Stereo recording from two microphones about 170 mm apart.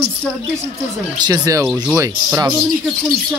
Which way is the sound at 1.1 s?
25° right (ahead or behind).